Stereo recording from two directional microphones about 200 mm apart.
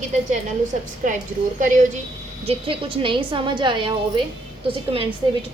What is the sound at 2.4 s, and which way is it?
A woman's voice, 25° right (ahead or behind).